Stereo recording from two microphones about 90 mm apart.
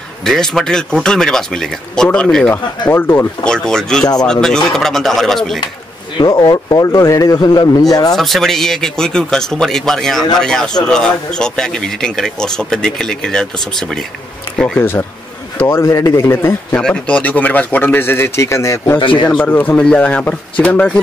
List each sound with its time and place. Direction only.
0.2 s speech: 5° left (ahead or behind)
2.9 s a man's voice: 25° left (ahead or behind)
3.4 s a man's voice: 10° left (ahead or behind)
6.1 s speech: 50° left (ahead or behind)
8.2 s a man's voice: 5° left (ahead or behind)
14.8 s a man's voice: 25° left (ahead or behind)
15.8 s a man's voice: 35° left (ahead or behind)
16.8 s a man's voice: 10° left (ahead or behind); by 18.9 s 35° left (ahead or behind)
18.9 s speech: 65° left (ahead or behind)
19.3 s speech: 20° left (ahead or behind)